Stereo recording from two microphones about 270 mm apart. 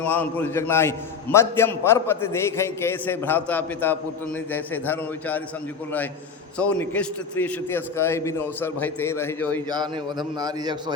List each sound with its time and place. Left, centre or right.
0.0 s a man's voice: centre
6.6 s a man's voice: centre
9.6 s a man's voice: centre